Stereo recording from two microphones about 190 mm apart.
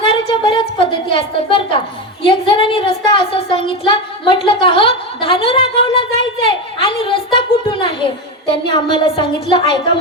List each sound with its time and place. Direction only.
0.0 s a woman's voice: 30° left (ahead or behind)
4.4 s a sound: 25° left (ahead or behind)
8.9 s a woman's voice: 25° left (ahead or behind)